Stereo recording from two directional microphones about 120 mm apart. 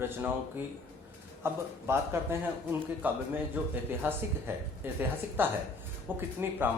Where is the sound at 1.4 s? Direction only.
20° right (ahead or behind).